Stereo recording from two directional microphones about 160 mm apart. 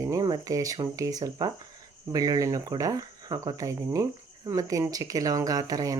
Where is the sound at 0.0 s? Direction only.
20° right (ahead or behind).